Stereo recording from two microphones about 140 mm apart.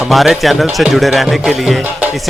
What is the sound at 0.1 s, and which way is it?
Speech, centre (ahead or behind).